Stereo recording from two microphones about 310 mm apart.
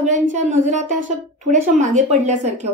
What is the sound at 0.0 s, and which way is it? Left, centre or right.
A woman's voice, right.